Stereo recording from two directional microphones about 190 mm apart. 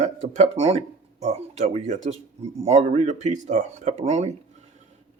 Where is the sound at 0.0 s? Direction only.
35° right (ahead or behind).